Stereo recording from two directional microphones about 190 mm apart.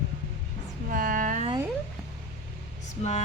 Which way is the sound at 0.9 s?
45° right (ahead or behind).